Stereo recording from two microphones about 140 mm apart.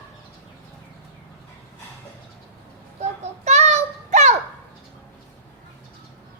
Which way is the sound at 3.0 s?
55° right (ahead or behind).